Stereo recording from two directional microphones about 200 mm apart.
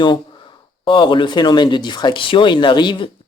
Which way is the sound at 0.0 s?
25° left (ahead or behind).